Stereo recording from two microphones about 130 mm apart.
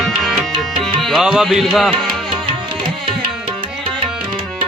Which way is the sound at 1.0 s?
5° right (ahead or behind).